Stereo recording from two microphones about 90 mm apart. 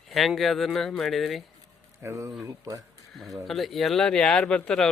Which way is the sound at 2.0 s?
35° right (ahead or behind).